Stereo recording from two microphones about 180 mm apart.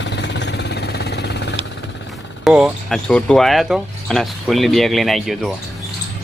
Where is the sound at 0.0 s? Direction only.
75° left (ahead or behind).